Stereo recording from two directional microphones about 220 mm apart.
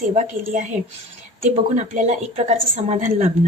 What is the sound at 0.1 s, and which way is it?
A woman's voice, 30° right (ahead or behind).